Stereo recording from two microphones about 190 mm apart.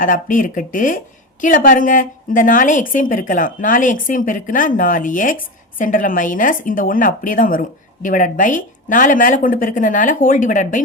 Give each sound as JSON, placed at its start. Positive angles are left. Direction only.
{"t": 0.0, "sound": "a woman's voice", "side_deg": 45}